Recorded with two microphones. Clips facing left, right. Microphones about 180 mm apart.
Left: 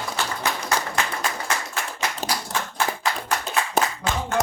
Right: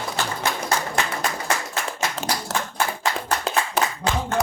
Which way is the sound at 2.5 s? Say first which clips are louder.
Right 4 dB; 90° right.